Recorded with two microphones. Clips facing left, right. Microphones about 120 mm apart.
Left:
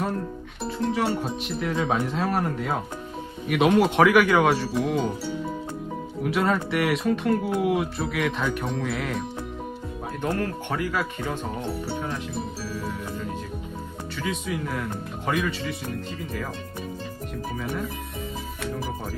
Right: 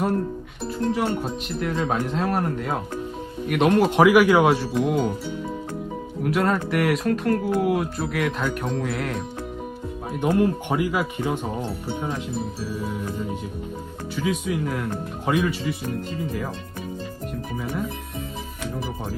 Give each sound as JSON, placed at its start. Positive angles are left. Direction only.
{"t": 0.9, "sound": "speech", "side_deg": 0}
{"t": 6.2, "sound": "speech", "side_deg": 0}
{"t": 10.2, "sound": "speech", "side_deg": -15}
{"t": 14.2, "sound": "speech", "side_deg": -5}